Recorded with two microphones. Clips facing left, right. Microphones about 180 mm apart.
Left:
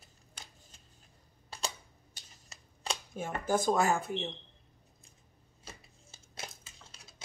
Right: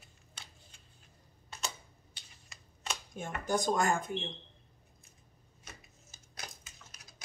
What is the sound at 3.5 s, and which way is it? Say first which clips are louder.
Speech: left 2 dB; 5° left (ahead or behind).